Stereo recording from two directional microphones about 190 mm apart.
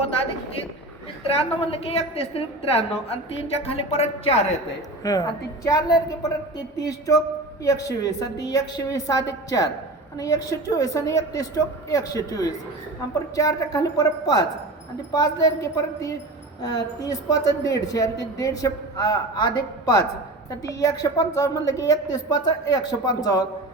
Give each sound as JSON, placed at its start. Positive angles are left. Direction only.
{"t": 1.3, "sound": "a woman's voice", "side_deg": 30}
{"t": 5.0, "sound": "a woman's voice", "side_deg": 20}
{"t": 7.6, "sound": "a woman's voice", "side_deg": 15}